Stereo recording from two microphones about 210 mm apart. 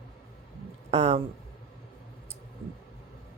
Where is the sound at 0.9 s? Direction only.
30° right (ahead or behind).